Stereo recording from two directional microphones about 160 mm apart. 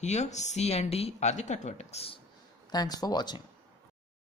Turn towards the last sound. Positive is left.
turn(degrees=25)  # may be behind; listen again after turning